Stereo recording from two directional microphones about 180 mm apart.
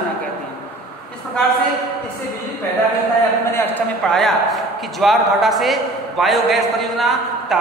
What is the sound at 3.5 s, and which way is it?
A man's voice, 10° left (ahead or behind).